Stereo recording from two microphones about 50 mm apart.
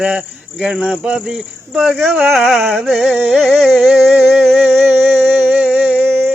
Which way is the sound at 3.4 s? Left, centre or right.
Centre.